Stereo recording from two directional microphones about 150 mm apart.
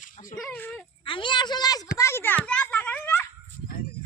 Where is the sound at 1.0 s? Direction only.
35° left (ahead or behind).